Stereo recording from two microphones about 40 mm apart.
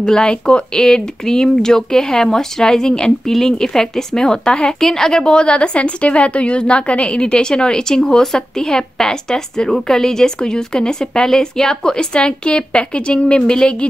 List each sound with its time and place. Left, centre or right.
0.0 s a woman's voice: left